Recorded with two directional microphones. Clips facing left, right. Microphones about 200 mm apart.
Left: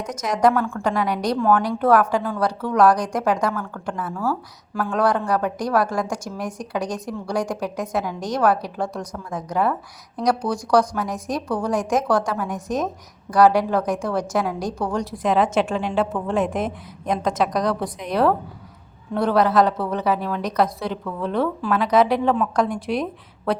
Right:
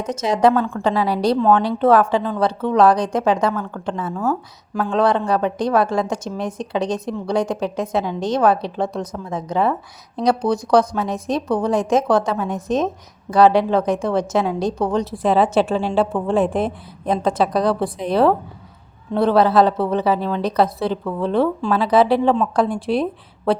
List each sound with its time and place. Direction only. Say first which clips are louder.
0.1 s a woman's voice: right 3 dB; 25° right (ahead or behind)